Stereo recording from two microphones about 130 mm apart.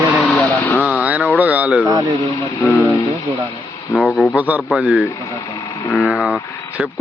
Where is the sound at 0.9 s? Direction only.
10° right (ahead or behind).